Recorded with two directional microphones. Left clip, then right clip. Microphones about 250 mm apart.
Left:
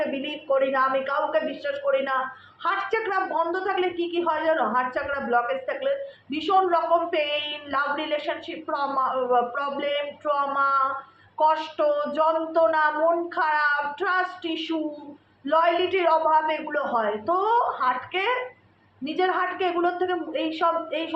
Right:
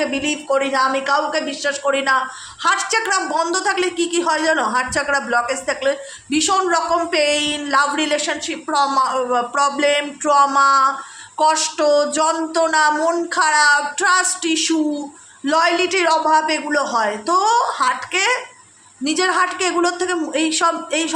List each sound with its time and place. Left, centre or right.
0.0 s speech: right